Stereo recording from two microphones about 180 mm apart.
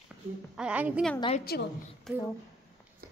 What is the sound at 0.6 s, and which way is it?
Speech, 5° right (ahead or behind).